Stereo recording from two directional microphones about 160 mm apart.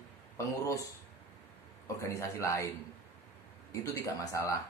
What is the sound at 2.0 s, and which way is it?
Speech, 20° left (ahead or behind).